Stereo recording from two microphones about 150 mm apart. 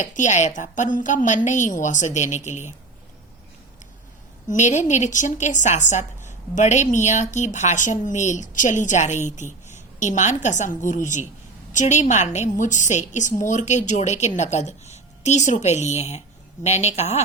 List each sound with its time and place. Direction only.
0.0 s a woman's voice: 55° left (ahead or behind)
4.4 s a woman's voice: 55° left (ahead or behind)